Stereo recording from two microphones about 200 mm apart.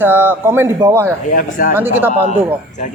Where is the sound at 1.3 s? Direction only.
45° left (ahead or behind).